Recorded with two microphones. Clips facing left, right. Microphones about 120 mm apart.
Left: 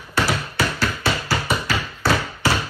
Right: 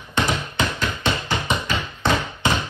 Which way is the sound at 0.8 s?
20° right (ahead or behind).